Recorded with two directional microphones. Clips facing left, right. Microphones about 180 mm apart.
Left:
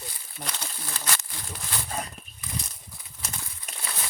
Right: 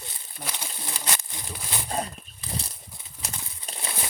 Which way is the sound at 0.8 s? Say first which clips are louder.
Right 1 dB; 20° right (ahead or behind).